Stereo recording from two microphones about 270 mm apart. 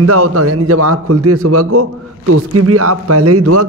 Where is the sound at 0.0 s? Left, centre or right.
Right.